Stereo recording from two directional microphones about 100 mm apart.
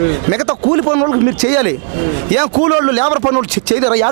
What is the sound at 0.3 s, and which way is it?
Speech, 20° right (ahead or behind).